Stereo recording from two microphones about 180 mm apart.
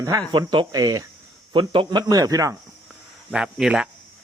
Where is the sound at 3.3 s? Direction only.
5° right (ahead or behind).